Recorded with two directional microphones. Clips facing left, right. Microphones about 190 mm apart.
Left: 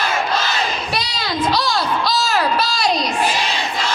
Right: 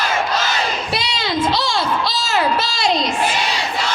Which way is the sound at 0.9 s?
25° right (ahead or behind).